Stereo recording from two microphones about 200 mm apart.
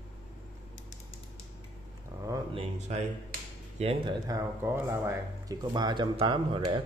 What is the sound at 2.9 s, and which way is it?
Speech, 35° right (ahead or behind).